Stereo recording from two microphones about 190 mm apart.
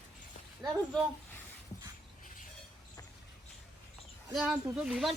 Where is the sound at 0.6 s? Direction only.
Centre (ahead or behind).